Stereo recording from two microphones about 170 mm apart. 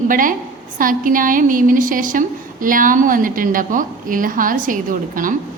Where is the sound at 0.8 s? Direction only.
55° right (ahead or behind).